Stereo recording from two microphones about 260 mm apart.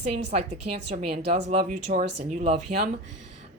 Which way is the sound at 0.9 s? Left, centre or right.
Right.